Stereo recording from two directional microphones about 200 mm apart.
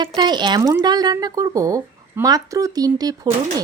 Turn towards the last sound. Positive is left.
turn(degrees=-20)  # may be behind; listen again after turning